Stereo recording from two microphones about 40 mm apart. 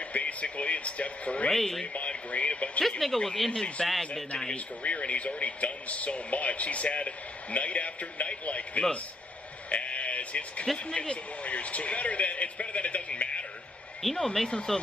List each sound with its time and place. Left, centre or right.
0.1 s speech: left
1.5 s speech: centre
2.0 s speech: left
3.3 s speech: centre
4.8 s speech: left
9.7 s sheep: left
10.9 s speech: left
14.1 s speech: centre